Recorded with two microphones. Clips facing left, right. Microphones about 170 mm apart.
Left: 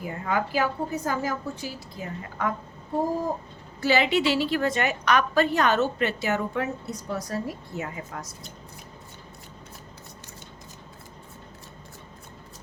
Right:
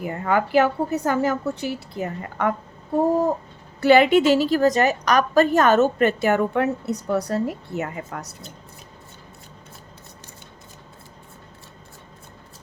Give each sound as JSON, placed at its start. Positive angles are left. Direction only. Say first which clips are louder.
{"t": 0.0, "sound": "a woman's voice", "louder": "right 5 dB", "side_deg": -60}
{"t": 3.8, "sound": "a woman's voice", "louder": "right 8 dB", "side_deg": -60}